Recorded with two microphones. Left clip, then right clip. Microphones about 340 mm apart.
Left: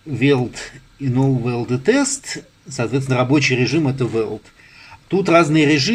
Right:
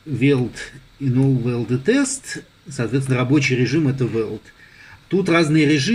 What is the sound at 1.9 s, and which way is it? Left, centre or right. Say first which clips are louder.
A man's voice: left 2 dB; centre.